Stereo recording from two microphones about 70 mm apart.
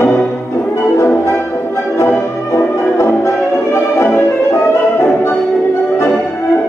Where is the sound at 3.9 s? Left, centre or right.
Left.